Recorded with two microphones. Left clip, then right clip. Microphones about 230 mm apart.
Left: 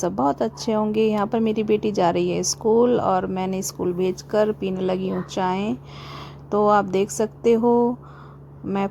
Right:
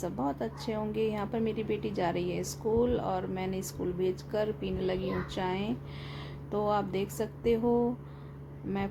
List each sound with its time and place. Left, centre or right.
0.0 s a woman's voice: left